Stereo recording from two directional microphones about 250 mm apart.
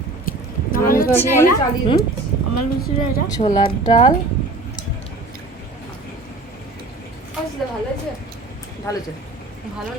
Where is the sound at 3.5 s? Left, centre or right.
Centre.